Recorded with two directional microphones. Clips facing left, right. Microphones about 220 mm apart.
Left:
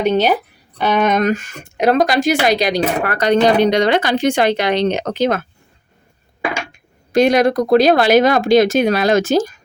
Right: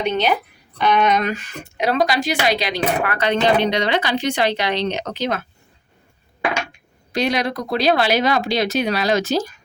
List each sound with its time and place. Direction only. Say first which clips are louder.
0.0 s speech: left 5 dB; 40° left (ahead or behind)
7.1 s speech: left 8 dB; 50° left (ahead or behind)